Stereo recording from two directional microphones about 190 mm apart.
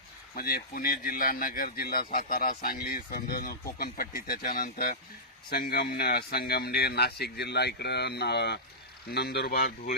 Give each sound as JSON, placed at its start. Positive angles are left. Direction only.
{"t": 0.3, "sound": "speech", "side_deg": 50}